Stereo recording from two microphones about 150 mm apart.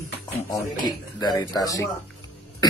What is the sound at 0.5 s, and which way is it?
Speech, 25° left (ahead or behind).